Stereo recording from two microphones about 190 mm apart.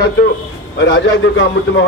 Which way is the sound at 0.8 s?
75° left (ahead or behind).